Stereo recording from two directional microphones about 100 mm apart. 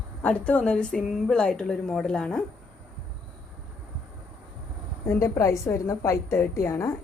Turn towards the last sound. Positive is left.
turn(degrees=30)  # may be behind; listen again after turning